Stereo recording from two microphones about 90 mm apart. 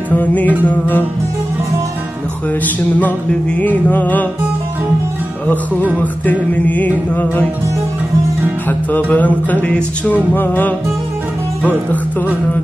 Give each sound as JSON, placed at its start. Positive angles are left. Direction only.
{"t": 0.1, "sound": "music", "side_deg": 20}
{"t": 2.6, "sound": "music", "side_deg": 20}
{"t": 6.5, "sound": "music", "side_deg": 15}
{"t": 8.6, "sound": "music", "side_deg": 20}